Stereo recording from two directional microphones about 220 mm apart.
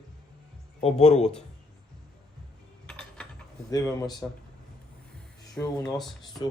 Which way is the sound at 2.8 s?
5° left (ahead or behind).